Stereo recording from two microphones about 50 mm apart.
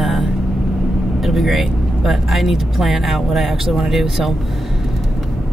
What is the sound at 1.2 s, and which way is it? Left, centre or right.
Speech, centre.